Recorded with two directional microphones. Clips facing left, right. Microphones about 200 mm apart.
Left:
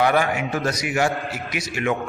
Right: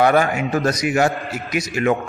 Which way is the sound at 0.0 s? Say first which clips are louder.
Right 4 dB; 45° right (ahead or behind).